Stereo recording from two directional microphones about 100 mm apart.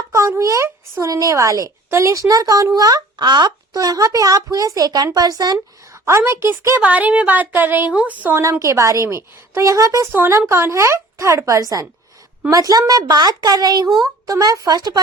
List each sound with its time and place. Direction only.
0.1 s speech: 30° right (ahead or behind)
6.1 s speech: 30° right (ahead or behind)
8.4 s speech: 30° right (ahead or behind)